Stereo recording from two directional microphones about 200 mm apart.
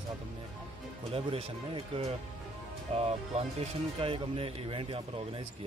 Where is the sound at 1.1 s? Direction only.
30° right (ahead or behind).